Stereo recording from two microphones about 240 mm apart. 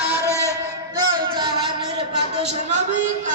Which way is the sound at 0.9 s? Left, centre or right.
Centre.